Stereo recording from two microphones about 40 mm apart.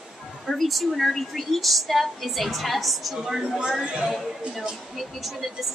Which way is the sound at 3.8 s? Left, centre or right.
Right.